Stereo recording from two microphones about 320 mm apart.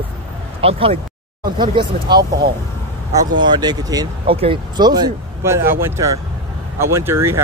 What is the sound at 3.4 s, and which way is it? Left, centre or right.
Speech, centre.